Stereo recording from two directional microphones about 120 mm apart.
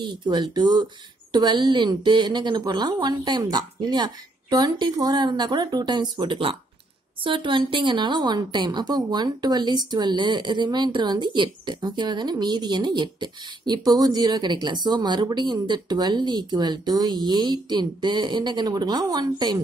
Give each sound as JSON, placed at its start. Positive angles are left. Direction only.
{"t": 0.0, "sound": "a woman's voice", "side_deg": -40}